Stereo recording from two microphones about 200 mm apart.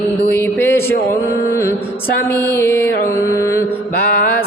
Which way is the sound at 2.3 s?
10° left (ahead or behind).